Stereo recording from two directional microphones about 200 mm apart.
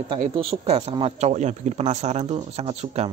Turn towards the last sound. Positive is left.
turn(degrees=-30)  # may be behind; listen again after turning